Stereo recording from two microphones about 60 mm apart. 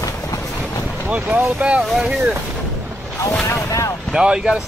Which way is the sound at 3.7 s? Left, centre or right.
Left.